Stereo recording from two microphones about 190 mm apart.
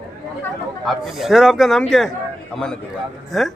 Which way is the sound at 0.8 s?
Centre (ahead or behind).